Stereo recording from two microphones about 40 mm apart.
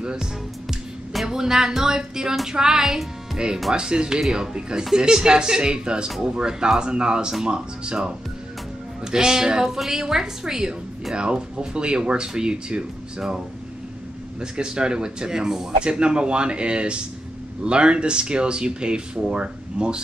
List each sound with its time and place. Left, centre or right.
0.0 s speech: centre
1.2 s music: centre
3.7 s speech: right
9.0 s music: centre
11.1 s speech: right
14.4 s speech: centre